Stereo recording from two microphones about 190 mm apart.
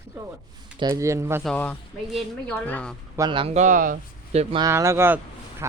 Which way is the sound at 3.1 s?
20° right (ahead or behind).